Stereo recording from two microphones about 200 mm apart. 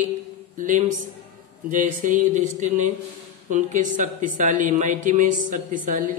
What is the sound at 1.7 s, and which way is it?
Mantra, 40° right (ahead or behind).